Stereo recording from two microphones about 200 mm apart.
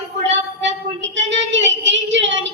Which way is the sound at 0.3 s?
65° right (ahead or behind).